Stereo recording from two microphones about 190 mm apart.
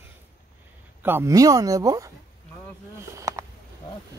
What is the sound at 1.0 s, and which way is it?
Speech, 15° right (ahead or behind).